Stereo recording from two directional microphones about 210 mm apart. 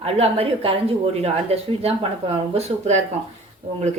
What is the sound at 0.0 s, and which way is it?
A woman's voice, 30° right (ahead or behind).